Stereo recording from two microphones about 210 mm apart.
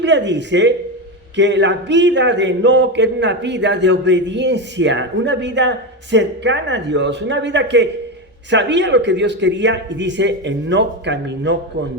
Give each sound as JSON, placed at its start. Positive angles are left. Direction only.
{"t": 0.0, "sound": "speech", "side_deg": -55}